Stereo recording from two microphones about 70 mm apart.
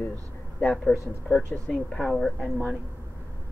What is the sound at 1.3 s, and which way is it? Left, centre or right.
Speech, left.